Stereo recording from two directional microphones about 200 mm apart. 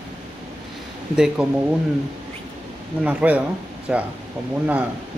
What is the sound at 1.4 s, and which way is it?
Speech, 5° right (ahead or behind).